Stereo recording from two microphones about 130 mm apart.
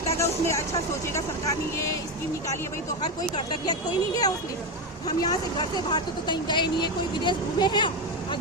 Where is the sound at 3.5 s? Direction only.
30° left (ahead or behind).